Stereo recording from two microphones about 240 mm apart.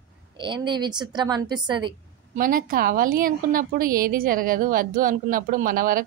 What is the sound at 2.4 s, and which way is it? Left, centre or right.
Speech, right.